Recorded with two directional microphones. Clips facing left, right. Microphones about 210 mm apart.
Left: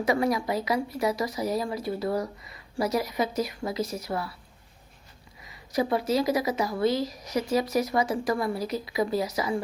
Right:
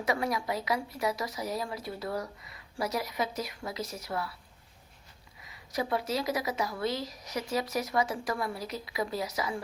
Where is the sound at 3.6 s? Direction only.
20° left (ahead or behind).